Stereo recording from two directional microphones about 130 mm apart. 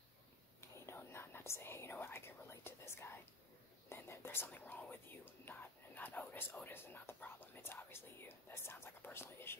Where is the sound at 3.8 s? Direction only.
20° left (ahead or behind).